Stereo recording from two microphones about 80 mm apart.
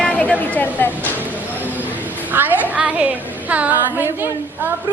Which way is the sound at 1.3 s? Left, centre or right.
Right.